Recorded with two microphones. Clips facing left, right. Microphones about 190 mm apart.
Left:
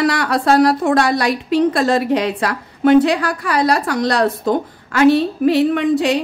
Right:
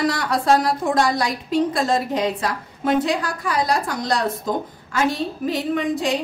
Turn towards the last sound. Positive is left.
turn(degrees=70)  # may be behind; listen again after turning